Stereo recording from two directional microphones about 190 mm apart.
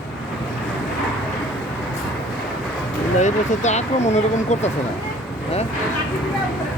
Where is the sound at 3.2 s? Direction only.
40° left (ahead or behind).